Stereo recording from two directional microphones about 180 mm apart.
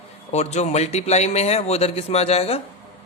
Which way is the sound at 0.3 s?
40° left (ahead or behind).